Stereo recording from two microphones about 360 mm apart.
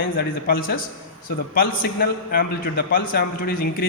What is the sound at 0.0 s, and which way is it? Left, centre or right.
A man's voice, left.